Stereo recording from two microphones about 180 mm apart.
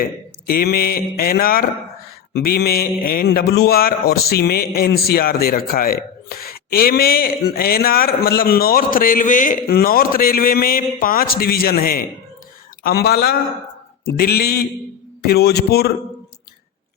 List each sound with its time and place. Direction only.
0.0 s speech: 55° left (ahead or behind)